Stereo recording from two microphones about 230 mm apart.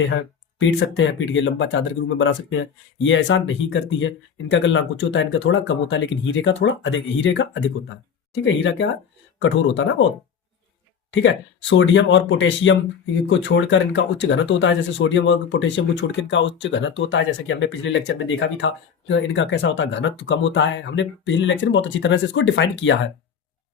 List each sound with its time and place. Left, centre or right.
0.8 s speech: left
11.1 s speech: left